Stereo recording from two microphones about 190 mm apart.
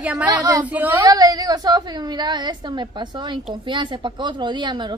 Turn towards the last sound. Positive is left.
turn(degrees=-25)  # may be behind; listen again after turning